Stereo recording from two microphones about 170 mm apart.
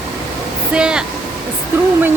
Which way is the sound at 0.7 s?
5° right (ahead or behind).